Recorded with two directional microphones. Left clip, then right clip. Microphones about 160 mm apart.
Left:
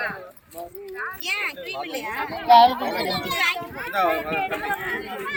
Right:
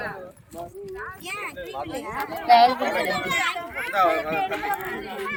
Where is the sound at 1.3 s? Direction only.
90° right.